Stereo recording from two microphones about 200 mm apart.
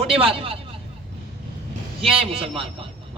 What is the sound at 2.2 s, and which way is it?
Speech, 30° right (ahead or behind).